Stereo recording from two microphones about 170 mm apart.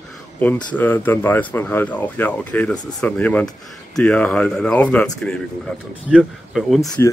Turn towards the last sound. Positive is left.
turn(degrees=15)  # may be behind; listen again after turning